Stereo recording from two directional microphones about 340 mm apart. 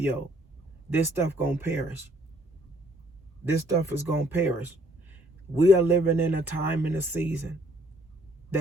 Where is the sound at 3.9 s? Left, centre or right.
Centre.